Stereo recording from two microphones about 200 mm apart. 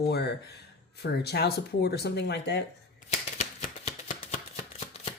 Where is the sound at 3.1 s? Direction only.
35° left (ahead or behind).